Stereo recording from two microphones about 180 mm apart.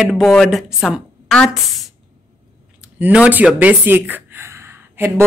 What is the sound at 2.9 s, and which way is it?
Speech, 10° right (ahead or behind).